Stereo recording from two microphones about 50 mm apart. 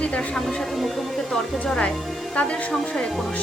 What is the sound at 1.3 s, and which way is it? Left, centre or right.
Speech, centre.